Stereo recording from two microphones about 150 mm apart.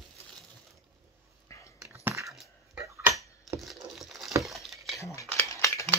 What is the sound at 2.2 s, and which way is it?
Dog, centre (ahead or behind).